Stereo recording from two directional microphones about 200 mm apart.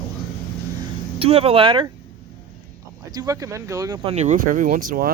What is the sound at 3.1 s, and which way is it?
Speech, 20° right (ahead or behind).